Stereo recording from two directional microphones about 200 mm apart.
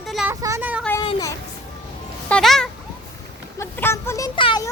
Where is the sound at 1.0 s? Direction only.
15° left (ahead or behind).